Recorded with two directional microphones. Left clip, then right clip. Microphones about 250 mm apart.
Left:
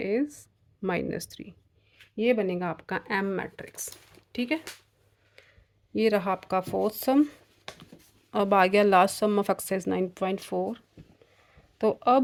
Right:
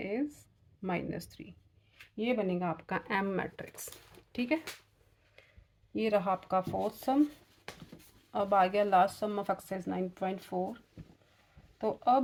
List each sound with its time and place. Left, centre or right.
0.0 s a sound: left
0.8 s speech: left
5.9 s speech: left